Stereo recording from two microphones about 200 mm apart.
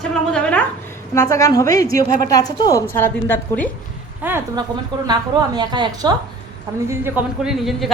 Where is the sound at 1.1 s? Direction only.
15° left (ahead or behind).